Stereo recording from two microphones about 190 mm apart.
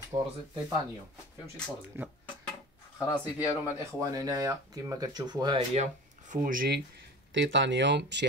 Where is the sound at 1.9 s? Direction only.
10° right (ahead or behind).